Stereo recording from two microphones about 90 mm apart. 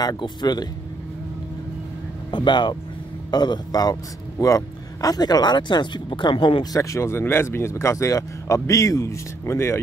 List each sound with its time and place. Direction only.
0.2 s a man's voice: 50° left (ahead or behind)
2.3 s a man's voice: 60° left (ahead or behind)
6.6 s speech: 40° left (ahead or behind)